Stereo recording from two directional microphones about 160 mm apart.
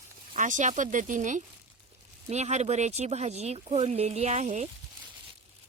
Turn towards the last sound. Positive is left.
turn(degrees=-45)  # may be behind; listen again after turning